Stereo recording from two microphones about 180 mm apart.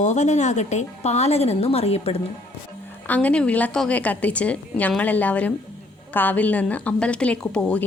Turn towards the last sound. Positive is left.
turn(degrees=5)  # may be behind; listen again after turning